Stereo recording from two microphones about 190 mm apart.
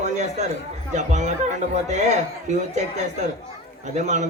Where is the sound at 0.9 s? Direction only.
40° right (ahead or behind).